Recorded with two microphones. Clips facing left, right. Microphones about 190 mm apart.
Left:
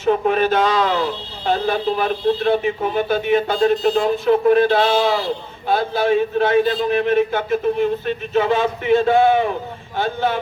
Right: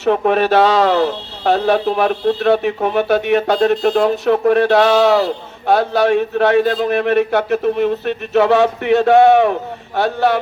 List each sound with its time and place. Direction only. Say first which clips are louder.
0.0 s speech: right 2 dB; 70° right (ahead or behind)